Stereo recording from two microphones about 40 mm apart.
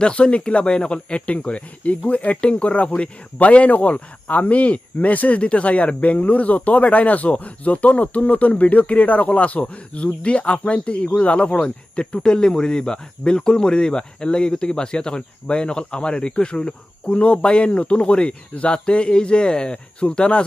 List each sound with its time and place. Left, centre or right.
0.0 s speech: left